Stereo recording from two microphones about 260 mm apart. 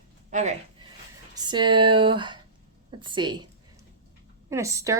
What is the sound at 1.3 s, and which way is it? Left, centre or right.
A woman's voice, centre.